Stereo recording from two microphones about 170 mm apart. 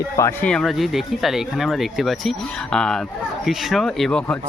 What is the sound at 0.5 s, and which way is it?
Speech, centre (ahead or behind).